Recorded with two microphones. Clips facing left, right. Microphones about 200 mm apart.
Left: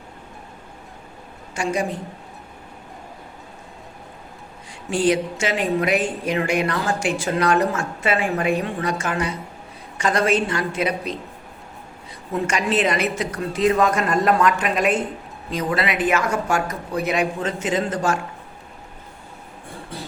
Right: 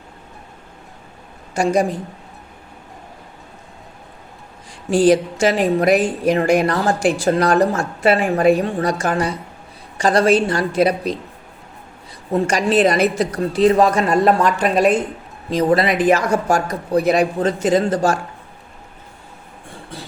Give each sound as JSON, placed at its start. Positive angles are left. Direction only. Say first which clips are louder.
{"t": 1.5, "sound": "a woman's voice", "louder": "right 7 dB", "side_deg": -40}
{"t": 4.9, "sound": "a woman's voice", "louder": "right 6 dB", "side_deg": -40}
{"t": 12.3, "sound": "a woman's voice", "louder": "right 5 dB", "side_deg": -35}